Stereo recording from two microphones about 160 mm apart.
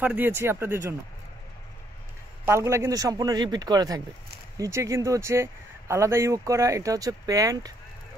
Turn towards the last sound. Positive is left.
turn(degrees=-25)  # may be behind; listen again after turning